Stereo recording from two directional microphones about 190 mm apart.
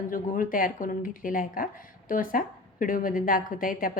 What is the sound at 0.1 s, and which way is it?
Speech, 45° left (ahead or behind).